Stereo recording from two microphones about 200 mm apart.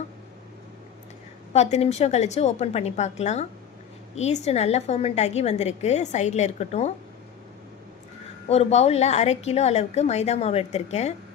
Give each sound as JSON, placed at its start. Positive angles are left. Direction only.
{"t": 1.5, "sound": "a woman's voice", "side_deg": 35}
{"t": 8.4, "sound": "a woman's voice", "side_deg": 30}